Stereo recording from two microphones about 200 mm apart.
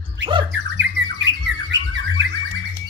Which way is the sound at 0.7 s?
65° right (ahead or behind).